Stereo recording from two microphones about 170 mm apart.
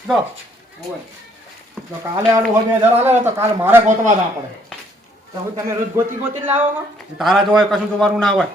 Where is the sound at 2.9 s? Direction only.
15° right (ahead or behind).